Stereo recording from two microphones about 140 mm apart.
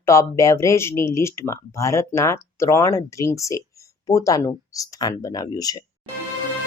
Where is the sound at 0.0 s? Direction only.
20° left (ahead or behind).